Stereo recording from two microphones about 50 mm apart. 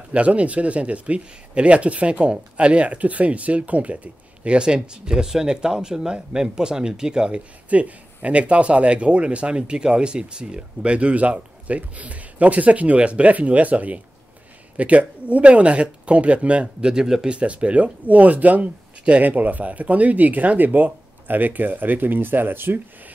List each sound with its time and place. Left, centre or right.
0.1 s speech: right
16.9 s speech: centre
17.4 s speech: right